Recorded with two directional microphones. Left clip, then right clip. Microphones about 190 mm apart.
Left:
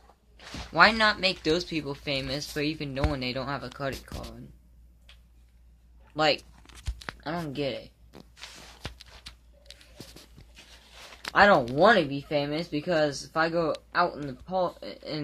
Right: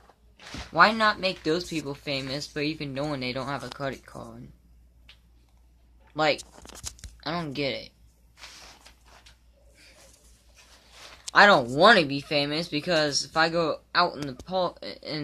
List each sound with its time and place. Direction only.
0.4 s speech: centre (ahead or behind)
6.5 s tearing: 45° right (ahead or behind)
7.2 s speech: 10° right (ahead or behind)
11.3 s speech: 5° right (ahead or behind)